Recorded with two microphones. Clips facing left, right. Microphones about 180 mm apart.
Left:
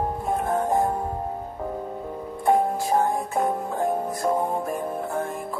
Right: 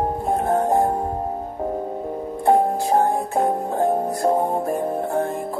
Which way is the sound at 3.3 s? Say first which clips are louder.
Right 5 dB; 30° right (ahead or behind).